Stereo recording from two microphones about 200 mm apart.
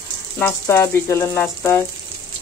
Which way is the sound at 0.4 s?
15° left (ahead or behind).